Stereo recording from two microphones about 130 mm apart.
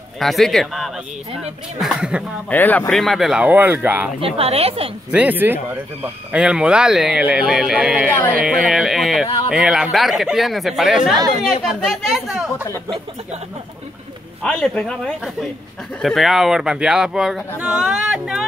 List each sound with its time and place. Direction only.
0.2 s speech: centre (ahead or behind)
2.5 s speech: 15° left (ahead or behind)
2.9 s speech: centre (ahead or behind)
4.2 s a woman's voice: 50° right (ahead or behind)
5.1 s speech: 10° right (ahead or behind)
14.4 s speech: 5° left (ahead or behind)